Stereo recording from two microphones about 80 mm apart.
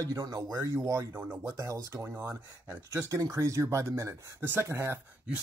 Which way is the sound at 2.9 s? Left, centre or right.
Right.